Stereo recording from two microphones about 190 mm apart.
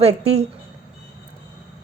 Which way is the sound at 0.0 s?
35° right (ahead or behind).